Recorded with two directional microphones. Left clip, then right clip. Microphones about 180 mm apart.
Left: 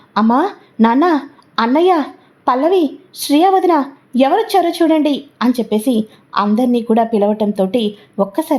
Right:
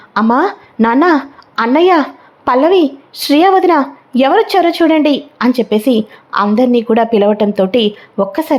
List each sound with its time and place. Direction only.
0.3 s a woman's voice: 5° right (ahead or behind)